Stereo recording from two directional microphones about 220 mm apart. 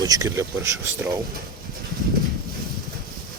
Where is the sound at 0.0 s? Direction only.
15° right (ahead or behind).